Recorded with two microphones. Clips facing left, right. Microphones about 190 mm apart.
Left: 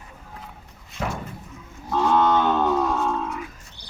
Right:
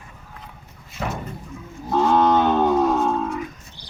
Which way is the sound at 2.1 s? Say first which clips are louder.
Right 2 dB; 20° right (ahead or behind).